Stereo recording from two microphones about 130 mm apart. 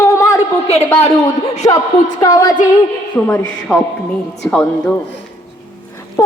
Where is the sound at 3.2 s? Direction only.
20° left (ahead or behind).